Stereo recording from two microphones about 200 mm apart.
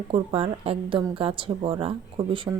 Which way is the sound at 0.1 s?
25° right (ahead or behind).